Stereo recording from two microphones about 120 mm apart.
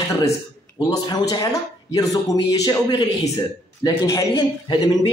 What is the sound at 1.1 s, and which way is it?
Speech, 30° left (ahead or behind).